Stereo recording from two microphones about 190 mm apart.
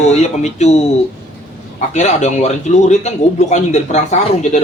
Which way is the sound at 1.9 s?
35° left (ahead or behind).